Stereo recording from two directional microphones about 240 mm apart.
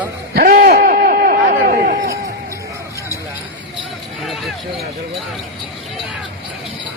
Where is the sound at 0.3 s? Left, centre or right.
Right.